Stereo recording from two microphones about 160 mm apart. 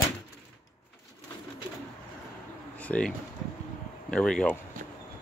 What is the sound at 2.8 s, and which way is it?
Pigeon, 5° left (ahead or behind).